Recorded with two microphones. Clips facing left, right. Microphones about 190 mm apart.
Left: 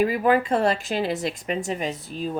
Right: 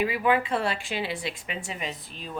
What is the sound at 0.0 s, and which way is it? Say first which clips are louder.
Speech: left 4 dB; 40° left (ahead or behind).